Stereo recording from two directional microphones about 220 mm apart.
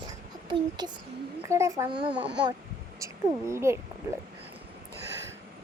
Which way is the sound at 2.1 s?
5° right (ahead or behind).